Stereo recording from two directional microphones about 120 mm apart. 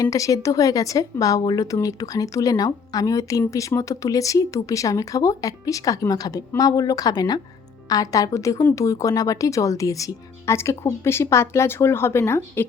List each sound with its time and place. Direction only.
0.0 s speech: 30° left (ahead or behind)